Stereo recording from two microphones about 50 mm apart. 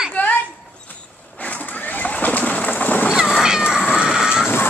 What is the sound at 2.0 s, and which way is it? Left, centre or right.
Pigeon, left.